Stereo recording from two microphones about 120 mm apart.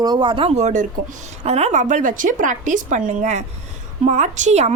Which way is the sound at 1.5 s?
65° right (ahead or behind).